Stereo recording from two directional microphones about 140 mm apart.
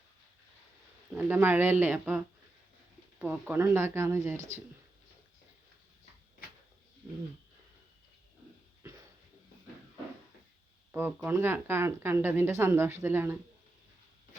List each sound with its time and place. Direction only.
1.1 s a woman's voice: 15° right (ahead or behind)
10.9 s a woman's voice: 15° right (ahead or behind)